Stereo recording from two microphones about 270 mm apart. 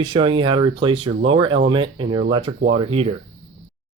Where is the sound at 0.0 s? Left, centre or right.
Centre.